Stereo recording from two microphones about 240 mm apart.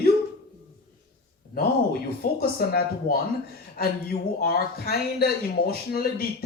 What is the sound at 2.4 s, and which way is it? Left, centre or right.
A man's voice, left.